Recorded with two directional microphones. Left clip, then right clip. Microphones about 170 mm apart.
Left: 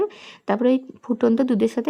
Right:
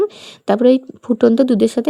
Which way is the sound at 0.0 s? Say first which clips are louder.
Right 6 dB; 30° right (ahead or behind).